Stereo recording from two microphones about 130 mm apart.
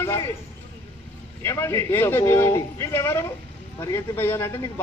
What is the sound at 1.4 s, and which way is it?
A man's voice, 20° left (ahead or behind).